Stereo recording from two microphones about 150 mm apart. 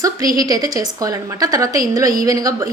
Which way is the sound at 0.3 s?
25° right (ahead or behind).